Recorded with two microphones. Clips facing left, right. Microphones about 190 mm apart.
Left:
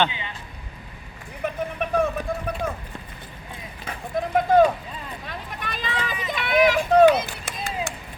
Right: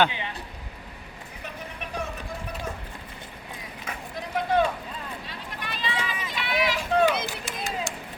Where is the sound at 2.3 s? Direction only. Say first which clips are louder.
Left 8 dB; 55° left (ahead or behind).